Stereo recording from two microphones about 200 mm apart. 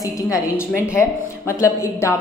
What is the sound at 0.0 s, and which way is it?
A woman's voice, 15° left (ahead or behind).